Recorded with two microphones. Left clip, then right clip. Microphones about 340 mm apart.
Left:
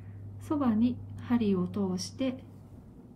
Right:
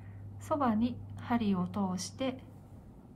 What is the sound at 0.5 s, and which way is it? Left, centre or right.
A woman's voice, centre.